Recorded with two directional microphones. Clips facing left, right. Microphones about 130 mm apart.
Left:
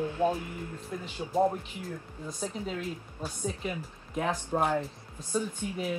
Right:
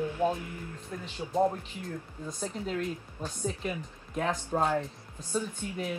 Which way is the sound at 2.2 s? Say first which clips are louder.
Even; 5° left (ahead or behind).